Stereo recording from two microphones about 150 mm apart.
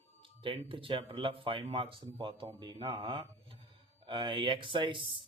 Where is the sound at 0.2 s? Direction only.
35° right (ahead or behind).